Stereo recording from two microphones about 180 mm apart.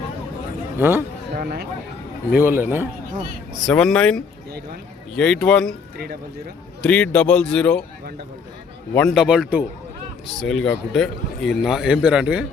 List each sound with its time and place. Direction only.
0.8 s a man's voice: 10° right (ahead or behind)
1.4 s speech: 60° right (ahead or behind)
2.3 s a man's voice: 10° right (ahead or behind)
3.7 s a man's voice: 5° left (ahead or behind)
6.8 s a man's voice: 5° left (ahead or behind)
9.0 s a man's voice: centre (ahead or behind)